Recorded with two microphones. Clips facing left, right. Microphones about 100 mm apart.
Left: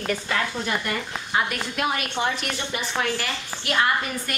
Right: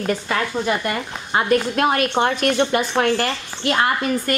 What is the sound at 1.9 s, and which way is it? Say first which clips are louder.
Speech: right 6 dB; 55° right (ahead or behind).